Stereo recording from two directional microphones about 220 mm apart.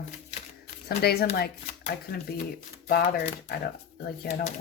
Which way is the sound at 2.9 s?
45° left (ahead or behind).